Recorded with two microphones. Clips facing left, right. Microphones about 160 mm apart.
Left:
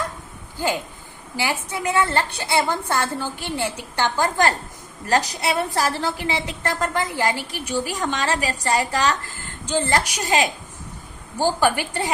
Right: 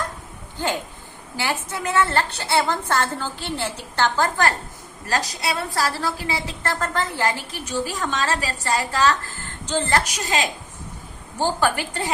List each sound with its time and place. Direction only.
1.4 s a woman's voice: 10° left (ahead or behind)